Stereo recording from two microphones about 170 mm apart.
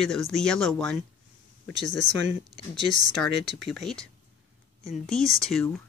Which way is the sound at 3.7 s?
Centre (ahead or behind).